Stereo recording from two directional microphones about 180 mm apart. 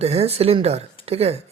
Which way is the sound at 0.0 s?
35° right (ahead or behind).